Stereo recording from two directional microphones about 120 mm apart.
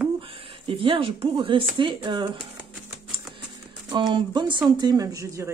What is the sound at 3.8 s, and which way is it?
A woman's voice, 40° right (ahead or behind).